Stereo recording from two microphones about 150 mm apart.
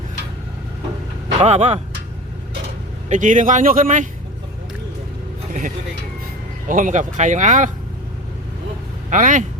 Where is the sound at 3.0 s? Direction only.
55° right (ahead or behind).